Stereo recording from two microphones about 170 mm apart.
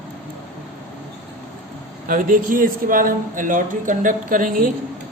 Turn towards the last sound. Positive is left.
turn(degrees=-55)  # may be behind; listen again after turning